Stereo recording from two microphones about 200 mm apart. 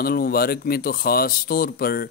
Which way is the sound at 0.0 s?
50° left (ahead or behind).